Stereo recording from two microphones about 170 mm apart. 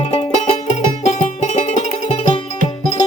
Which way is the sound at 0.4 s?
45° left (ahead or behind).